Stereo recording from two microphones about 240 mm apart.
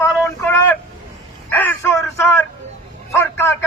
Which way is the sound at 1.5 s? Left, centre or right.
Centre.